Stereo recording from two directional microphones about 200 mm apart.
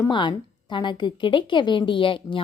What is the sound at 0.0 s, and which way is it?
Speech, 20° left (ahead or behind).